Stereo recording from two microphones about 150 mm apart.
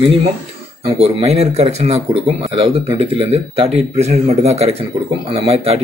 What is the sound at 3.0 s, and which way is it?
Speech, 40° right (ahead or behind).